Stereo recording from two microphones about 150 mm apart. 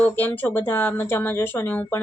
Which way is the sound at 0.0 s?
10° left (ahead or behind).